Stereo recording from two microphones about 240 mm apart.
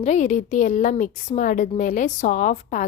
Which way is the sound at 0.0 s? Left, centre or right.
Left.